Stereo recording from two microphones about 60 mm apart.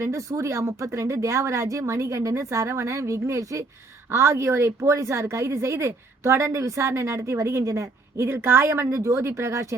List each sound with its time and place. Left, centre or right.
0.0 s speech: right